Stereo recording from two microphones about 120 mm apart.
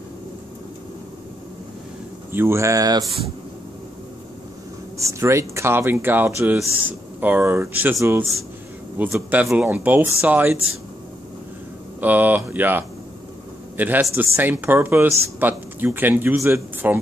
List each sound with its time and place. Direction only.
2.3 s speech: 20° right (ahead or behind)
4.9 s speech: 25° right (ahead or behind)
12.0 s a man's voice: 15° right (ahead or behind)